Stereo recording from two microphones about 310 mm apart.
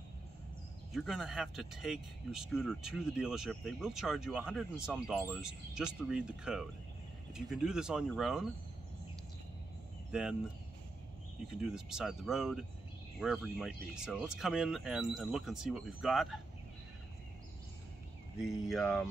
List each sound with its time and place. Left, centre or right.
0.9 s speech: centre
10.1 s speech: centre
11.6 s speech: centre
18.4 s speech: centre